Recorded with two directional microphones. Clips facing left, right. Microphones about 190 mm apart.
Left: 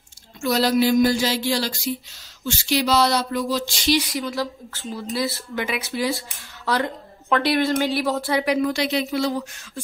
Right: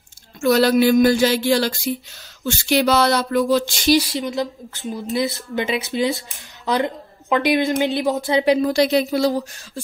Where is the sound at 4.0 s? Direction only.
30° right (ahead or behind).